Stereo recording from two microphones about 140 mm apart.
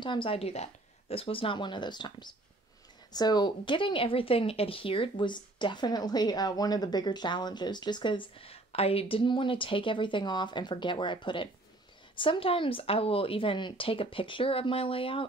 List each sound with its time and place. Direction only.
0.0 s speech: 35° left (ahead or behind)